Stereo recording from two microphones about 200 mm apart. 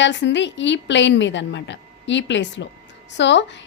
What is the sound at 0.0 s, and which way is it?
A woman's voice, 60° left (ahead or behind).